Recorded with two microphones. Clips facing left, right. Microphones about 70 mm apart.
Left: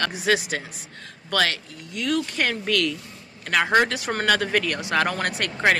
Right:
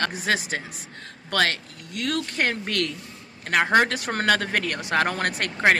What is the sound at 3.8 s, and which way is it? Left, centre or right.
Speech, right.